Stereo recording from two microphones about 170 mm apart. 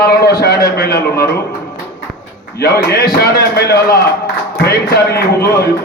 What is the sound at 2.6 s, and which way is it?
A man's voice, 65° left (ahead or behind).